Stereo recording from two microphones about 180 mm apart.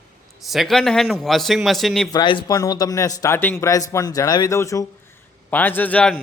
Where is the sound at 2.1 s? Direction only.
25° left (ahead or behind).